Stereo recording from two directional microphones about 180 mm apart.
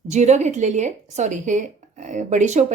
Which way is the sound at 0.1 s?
40° right (ahead or behind).